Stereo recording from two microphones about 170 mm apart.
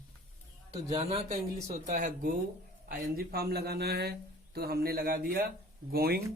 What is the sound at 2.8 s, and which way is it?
A man's voice, 60° right (ahead or behind).